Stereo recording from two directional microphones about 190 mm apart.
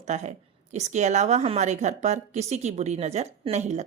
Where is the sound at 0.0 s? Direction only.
40° right (ahead or behind).